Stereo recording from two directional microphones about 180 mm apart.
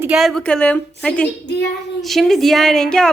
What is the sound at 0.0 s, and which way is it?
A woman's voice, 5° right (ahead or behind).